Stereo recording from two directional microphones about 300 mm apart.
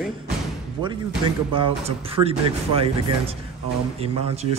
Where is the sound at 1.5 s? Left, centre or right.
Centre.